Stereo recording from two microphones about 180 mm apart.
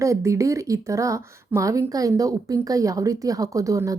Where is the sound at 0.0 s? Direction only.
15° right (ahead or behind).